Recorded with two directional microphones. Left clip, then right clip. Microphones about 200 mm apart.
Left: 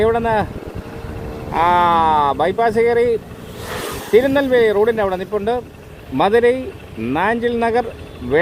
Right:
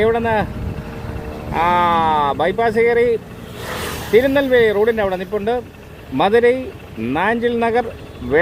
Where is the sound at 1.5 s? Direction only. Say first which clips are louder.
Left 1 dB; 10° left (ahead or behind).